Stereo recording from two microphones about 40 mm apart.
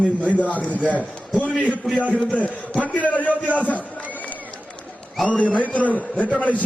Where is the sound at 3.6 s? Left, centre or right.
Left.